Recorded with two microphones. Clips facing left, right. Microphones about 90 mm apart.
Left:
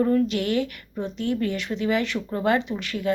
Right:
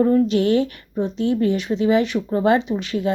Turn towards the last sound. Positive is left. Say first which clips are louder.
# right 4 dB
turn(degrees=-20)  # may be behind; listen again after turning